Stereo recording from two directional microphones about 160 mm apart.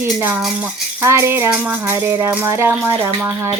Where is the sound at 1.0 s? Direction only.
15° right (ahead or behind).